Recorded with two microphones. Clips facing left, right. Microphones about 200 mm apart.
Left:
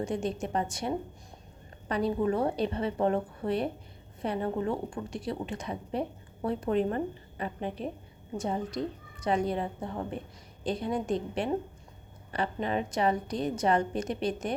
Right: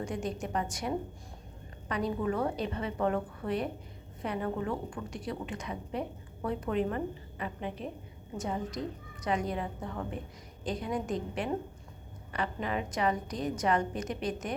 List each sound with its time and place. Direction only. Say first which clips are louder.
0.0 s a woman's voice: left 4 dB; 25° left (ahead or behind)